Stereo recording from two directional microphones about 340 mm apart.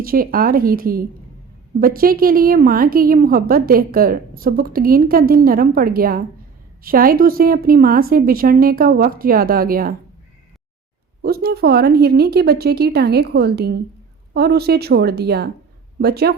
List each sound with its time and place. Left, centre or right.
0.0 s a woman's voice: right
11.2 s a woman's voice: right